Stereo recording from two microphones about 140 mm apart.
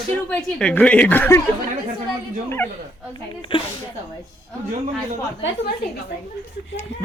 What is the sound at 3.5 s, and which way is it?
Speech, 35° left (ahead or behind).